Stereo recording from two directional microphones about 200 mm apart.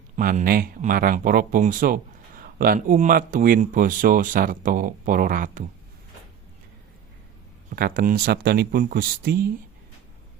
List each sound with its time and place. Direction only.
0.2 s speech: 45° right (ahead or behind)
7.8 s speech: 45° right (ahead or behind)